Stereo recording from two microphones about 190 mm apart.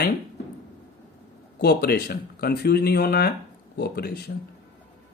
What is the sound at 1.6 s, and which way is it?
Speech, 55° left (ahead or behind).